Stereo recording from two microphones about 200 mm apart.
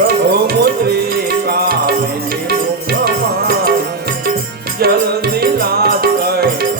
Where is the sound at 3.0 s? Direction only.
50° right (ahead or behind).